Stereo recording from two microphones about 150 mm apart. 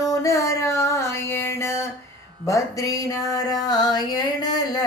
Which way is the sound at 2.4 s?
20° left (ahead or behind).